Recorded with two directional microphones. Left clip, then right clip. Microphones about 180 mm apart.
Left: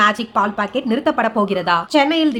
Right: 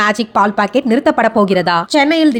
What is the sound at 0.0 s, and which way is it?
Speech, 35° right (ahead or behind).